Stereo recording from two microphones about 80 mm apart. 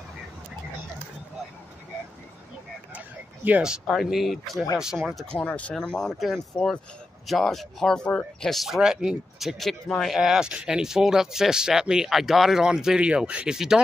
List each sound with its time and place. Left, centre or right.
3.9 s speech: centre
5.2 s speech: centre
5.8 s speech: centre